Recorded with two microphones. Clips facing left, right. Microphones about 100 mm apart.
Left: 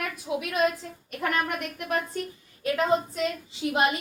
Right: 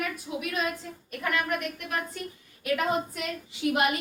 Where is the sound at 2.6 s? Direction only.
30° left (ahead or behind).